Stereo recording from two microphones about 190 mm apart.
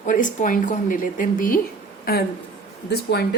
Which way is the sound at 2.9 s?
60° left (ahead or behind).